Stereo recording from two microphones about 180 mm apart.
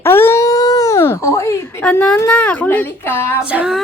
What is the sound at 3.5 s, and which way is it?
Music, 5° right (ahead or behind).